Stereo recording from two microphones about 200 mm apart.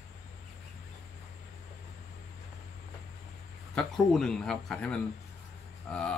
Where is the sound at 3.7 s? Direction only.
5° left (ahead or behind).